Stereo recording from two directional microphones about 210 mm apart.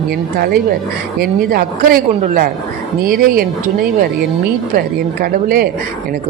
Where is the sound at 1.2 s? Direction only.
45° right (ahead or behind).